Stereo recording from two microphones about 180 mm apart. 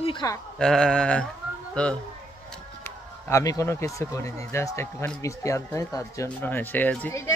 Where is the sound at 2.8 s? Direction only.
20° left (ahead or behind).